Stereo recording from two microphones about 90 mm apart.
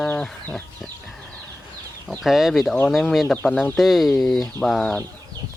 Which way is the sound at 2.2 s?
5° right (ahead or behind).